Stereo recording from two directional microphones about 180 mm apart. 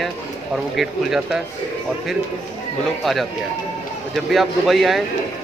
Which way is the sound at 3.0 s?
Centre (ahead or behind).